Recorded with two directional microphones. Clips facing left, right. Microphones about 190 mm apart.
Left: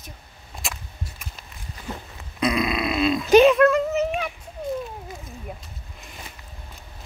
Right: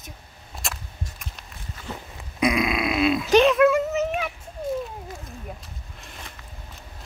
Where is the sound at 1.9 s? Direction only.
10° left (ahead or behind).